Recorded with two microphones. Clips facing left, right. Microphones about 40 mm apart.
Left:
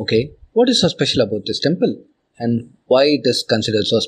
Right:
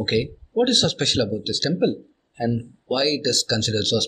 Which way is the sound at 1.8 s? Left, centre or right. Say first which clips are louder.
Left 3 dB; centre.